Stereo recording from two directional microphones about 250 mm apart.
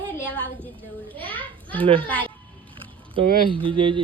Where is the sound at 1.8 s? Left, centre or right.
Right.